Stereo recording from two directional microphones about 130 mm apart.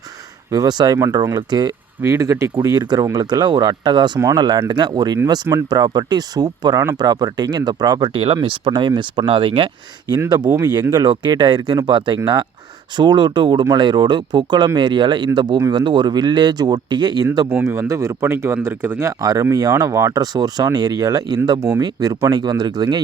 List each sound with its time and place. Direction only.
0.5 s speech: 30° right (ahead or behind)
2.0 s speech: 20° right (ahead or behind)
17.5 s speech: 20° right (ahead or behind)